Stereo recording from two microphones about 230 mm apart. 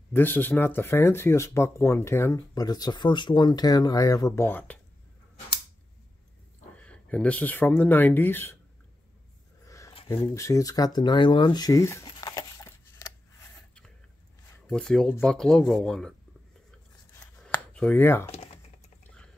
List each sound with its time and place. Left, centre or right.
0.1 s speech: centre
6.8 s speech: centre
9.7 s a sound: centre
14.7 s speech: centre
17.1 s a sound: centre
18.3 s typing: left